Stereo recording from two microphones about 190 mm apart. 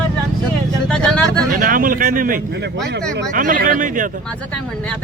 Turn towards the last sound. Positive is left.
turn(degrees=-45)  # may be behind; listen again after turning